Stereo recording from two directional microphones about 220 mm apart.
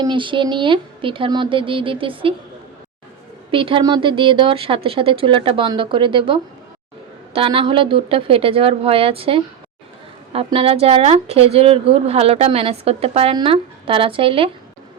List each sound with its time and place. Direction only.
0.0 s a woman's voice: 20° right (ahead or behind)
3.5 s a woman's voice: 25° right (ahead or behind)